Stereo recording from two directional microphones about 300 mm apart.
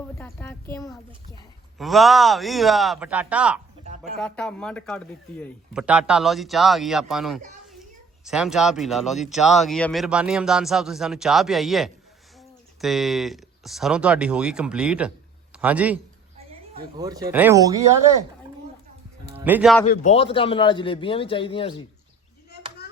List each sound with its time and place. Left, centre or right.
0.2 s a man's voice: centre
1.8 s speech: centre
19.3 s speech: centre
19.8 s a man's voice: left